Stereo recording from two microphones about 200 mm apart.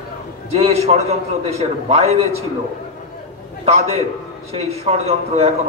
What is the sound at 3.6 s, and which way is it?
A man's voice, 30° right (ahead or behind).